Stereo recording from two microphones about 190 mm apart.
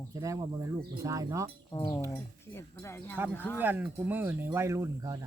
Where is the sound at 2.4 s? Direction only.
15° left (ahead or behind).